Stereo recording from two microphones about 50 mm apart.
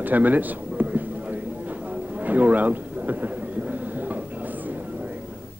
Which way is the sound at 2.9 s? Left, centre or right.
Right.